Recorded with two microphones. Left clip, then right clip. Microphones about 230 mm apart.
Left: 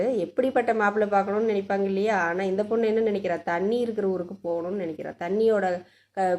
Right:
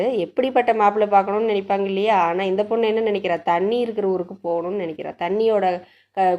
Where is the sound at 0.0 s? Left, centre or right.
Right.